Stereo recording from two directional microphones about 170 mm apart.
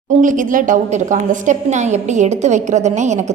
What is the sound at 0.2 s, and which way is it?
A woman's voice, 50° right (ahead or behind).